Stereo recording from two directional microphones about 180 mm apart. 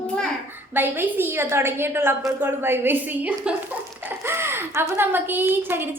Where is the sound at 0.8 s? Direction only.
10° right (ahead or behind).